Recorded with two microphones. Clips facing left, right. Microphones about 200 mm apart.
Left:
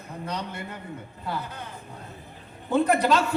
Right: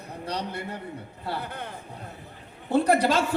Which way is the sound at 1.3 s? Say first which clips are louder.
Right 1 dB; 60° right (ahead or behind).